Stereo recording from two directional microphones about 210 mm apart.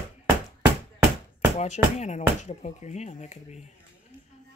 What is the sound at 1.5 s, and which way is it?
Speech, 30° left (ahead or behind).